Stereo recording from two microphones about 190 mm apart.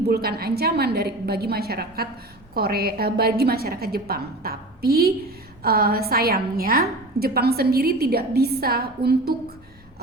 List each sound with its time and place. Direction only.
0.1 s a woman's voice: 55° right (ahead or behind)